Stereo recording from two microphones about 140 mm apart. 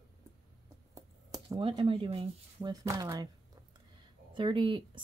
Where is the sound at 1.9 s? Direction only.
45° right (ahead or behind).